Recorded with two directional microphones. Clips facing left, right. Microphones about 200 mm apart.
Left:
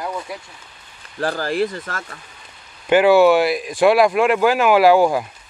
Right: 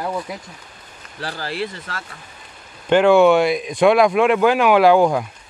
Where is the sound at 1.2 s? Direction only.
45° left (ahead or behind).